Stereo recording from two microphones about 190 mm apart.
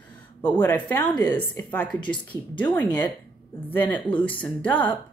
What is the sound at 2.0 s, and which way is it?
Speech, 25° left (ahead or behind).